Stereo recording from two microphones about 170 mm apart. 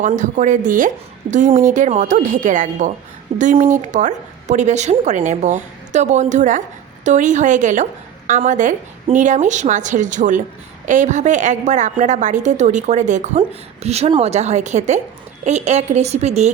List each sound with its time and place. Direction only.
0.0 s a woman's voice: 50° right (ahead or behind)